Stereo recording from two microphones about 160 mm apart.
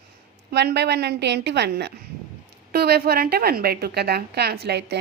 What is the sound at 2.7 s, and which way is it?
A woman's voice, 75° right (ahead or behind).